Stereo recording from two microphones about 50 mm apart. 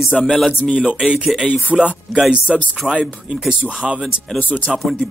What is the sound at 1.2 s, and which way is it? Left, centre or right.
Speech, centre.